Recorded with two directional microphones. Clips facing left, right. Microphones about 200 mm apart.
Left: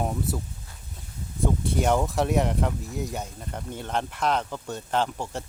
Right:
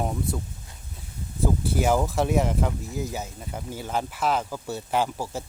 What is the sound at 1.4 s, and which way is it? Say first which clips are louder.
Speech: right 1 dB; 5° right (ahead or behind).